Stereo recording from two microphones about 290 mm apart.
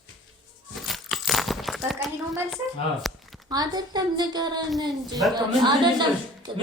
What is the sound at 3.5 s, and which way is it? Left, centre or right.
A woman's voice, centre.